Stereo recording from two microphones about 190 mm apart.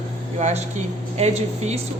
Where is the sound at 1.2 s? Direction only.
35° right (ahead or behind).